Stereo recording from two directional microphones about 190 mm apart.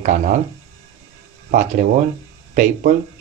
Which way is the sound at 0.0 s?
40° right (ahead or behind).